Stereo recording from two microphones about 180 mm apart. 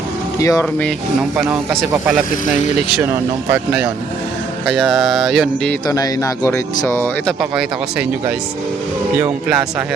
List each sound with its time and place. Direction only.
0.3 s speech: 20° left (ahead or behind)
0.6 s speech: 10° left (ahead or behind)
1.7 s speech: 5° right (ahead or behind)
4.6 s mantra: centre (ahead or behind)
5.9 s speech: 20° left (ahead or behind)